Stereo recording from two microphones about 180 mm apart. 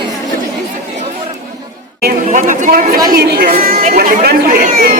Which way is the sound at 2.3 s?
45° right (ahead or behind).